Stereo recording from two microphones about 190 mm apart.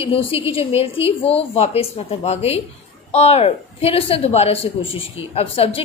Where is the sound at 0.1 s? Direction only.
30° left (ahead or behind).